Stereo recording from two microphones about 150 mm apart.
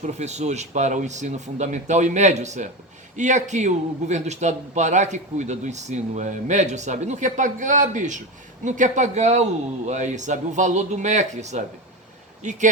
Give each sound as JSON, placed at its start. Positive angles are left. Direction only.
{"t": 0.0, "sound": "speech", "side_deg": -50}